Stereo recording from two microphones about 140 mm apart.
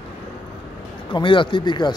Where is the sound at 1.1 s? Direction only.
35° left (ahead or behind).